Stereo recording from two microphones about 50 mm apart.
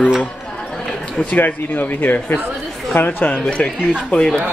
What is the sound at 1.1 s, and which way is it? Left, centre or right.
Speech, left.